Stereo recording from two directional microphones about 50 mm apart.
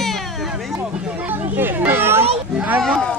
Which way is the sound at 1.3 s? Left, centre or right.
Right.